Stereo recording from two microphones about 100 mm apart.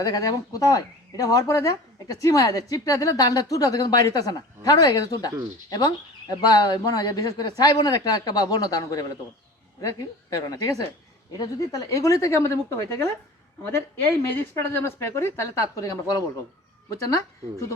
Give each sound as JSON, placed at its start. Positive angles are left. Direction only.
{"t": 0.0, "sound": "a woman's voice", "side_deg": 40}